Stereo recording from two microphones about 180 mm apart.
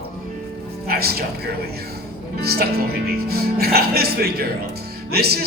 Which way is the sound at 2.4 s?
60° right (ahead or behind).